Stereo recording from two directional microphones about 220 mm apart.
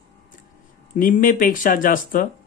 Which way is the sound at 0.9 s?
40° left (ahead or behind).